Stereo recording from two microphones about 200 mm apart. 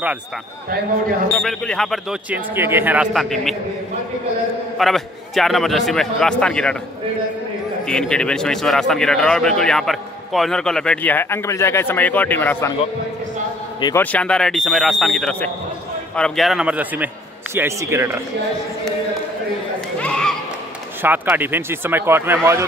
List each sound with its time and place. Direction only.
1.3 s speech: centre (ahead or behind)
4.7 s speech: centre (ahead or behind)
7.8 s speech: 5° left (ahead or behind)
13.7 s a man's voice: 20° left (ahead or behind)
14.1 s speech: 5° left (ahead or behind); by 18.2 s 10° right (ahead or behind)
20.0 s a sound: 5° left (ahead or behind)
21.0 s speech: 10° right (ahead or behind)